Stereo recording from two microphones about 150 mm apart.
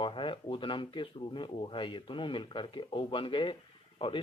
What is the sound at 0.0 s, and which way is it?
Speech, 35° left (ahead or behind).